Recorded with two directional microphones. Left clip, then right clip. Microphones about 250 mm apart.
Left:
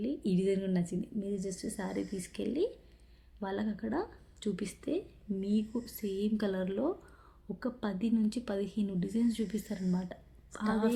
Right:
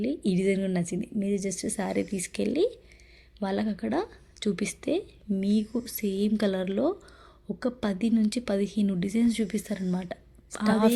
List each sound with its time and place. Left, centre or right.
0.0 s a woman's voice: right